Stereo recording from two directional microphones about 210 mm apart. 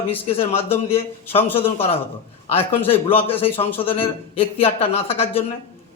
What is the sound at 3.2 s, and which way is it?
A man's voice, 25° left (ahead or behind).